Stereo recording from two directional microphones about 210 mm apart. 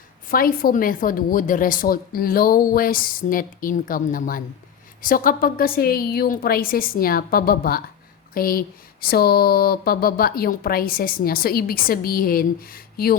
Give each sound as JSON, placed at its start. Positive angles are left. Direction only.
{"t": 0.3, "sound": "a woman's voice", "side_deg": 45}